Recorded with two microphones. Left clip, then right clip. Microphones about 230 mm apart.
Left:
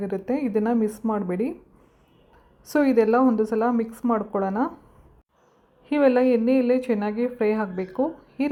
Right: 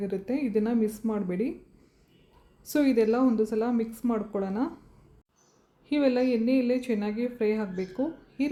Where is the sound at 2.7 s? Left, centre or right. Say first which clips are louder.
Left 5 dB; centre.